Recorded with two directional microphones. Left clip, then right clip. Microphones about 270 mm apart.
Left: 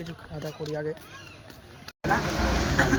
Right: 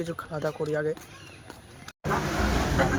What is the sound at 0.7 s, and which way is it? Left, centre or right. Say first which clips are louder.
Speech: right 2 dB; centre.